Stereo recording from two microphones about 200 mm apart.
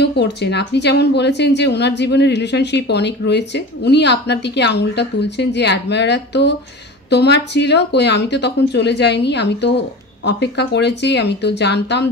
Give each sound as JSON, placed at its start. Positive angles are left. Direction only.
{"t": 0.0, "sound": "a woman's voice", "side_deg": 55}